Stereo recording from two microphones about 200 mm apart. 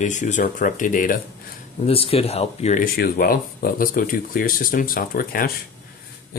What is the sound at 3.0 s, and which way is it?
Speech, 45° left (ahead or behind).